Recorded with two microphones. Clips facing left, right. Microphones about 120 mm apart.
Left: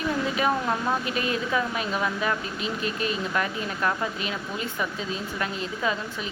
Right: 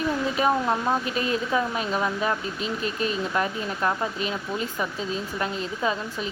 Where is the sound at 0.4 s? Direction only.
35° right (ahead or behind).